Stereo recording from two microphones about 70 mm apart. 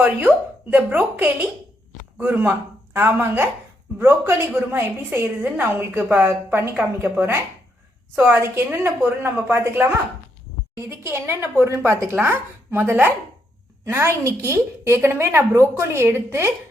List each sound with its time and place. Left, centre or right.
0.0 s a woman's voice: right
5.2 s a woman's voice: right
13.8 s a woman's voice: right